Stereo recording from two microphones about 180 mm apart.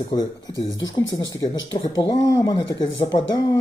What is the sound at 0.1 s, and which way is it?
Speech, 20° left (ahead or behind).